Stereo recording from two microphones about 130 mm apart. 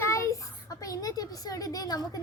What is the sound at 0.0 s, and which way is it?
A child's voice, 20° left (ahead or behind).